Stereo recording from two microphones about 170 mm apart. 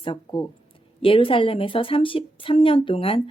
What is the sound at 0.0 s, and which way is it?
A woman's voice, 30° left (ahead or behind).